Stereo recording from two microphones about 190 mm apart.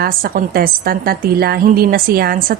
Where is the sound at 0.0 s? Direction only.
50° right (ahead or behind).